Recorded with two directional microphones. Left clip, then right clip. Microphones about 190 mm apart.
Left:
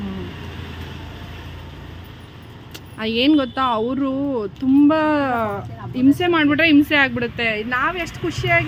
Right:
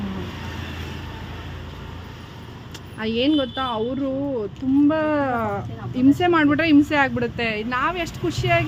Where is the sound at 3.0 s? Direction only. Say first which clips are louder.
Left 3 dB; 10° left (ahead or behind).